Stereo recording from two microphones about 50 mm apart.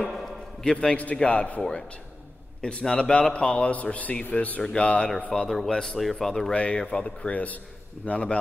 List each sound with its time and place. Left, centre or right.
0.1 s a sound: centre
0.7 s a man's voice: left
1.6 s a man's voice: centre
5.3 s a man's voice: centre
6.5 s a man's voice: left